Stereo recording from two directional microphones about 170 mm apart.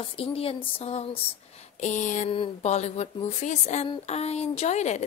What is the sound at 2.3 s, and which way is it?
A woman's voice, 35° left (ahead or behind).